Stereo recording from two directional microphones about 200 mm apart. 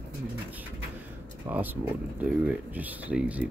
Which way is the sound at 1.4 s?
10° right (ahead or behind).